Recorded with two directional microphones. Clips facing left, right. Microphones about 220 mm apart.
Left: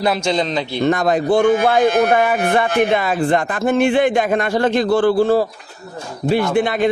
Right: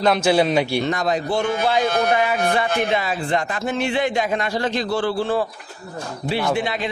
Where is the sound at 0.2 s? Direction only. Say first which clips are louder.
Right 2 dB; 10° right (ahead or behind).